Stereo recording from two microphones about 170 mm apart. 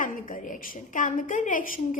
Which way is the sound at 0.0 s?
50° left (ahead or behind).